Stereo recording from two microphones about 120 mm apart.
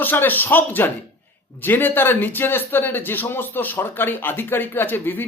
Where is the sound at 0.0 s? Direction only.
15° left (ahead or behind).